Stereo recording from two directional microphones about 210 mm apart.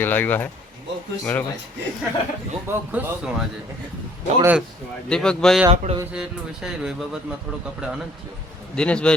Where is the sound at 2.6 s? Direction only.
10° right (ahead or behind).